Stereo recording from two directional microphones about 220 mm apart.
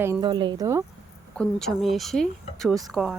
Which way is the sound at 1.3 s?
5° left (ahead or behind).